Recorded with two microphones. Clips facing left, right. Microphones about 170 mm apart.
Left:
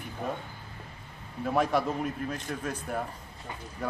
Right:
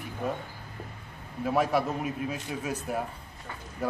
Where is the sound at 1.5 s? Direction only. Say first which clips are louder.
Right 1 dB; 5° right (ahead or behind).